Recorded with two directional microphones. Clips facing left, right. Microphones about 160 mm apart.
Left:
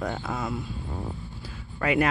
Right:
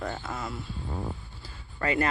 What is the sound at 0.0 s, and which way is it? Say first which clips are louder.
Speech: left 4 dB; 15° left (ahead or behind).